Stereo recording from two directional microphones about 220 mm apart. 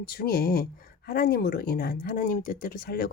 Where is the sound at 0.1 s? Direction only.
45° left (ahead or behind).